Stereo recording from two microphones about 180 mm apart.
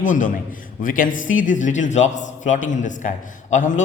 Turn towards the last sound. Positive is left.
turn(degrees=45)  # may be behind; listen again after turning